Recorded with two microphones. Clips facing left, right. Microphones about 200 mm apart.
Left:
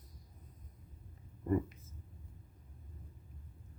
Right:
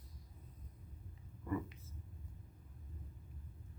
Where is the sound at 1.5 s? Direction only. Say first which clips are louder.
Left 7 dB; 40° left (ahead or behind).